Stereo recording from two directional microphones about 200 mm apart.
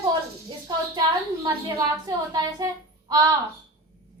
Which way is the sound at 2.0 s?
15° right (ahead or behind).